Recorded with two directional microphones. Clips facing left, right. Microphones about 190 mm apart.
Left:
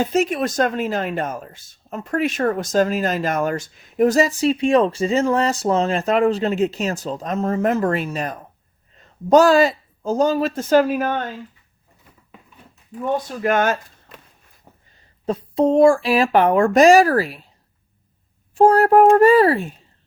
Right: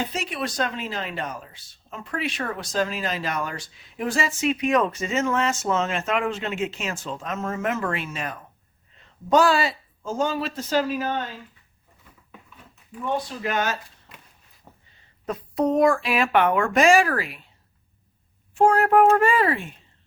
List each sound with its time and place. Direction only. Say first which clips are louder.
0.0 s speech: left 9 dB; 45° left (ahead or behind)
13.2 s speech: left 7 dB; 50° left (ahead or behind)
15.3 s speech: left 5 dB; 30° left (ahead or behind)
18.5 s speech: left 5 dB; 35° left (ahead or behind)